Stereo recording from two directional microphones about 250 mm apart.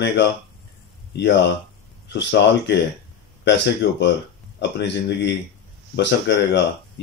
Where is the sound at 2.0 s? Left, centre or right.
Left.